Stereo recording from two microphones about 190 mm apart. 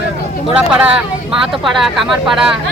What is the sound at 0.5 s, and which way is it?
Speech, 5° right (ahead or behind).